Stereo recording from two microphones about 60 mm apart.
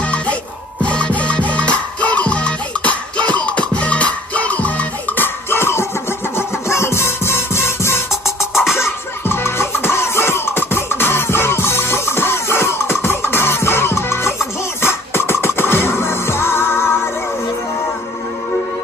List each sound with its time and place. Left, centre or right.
0.0 s music: left
8.1 s music: centre
8.7 s music: left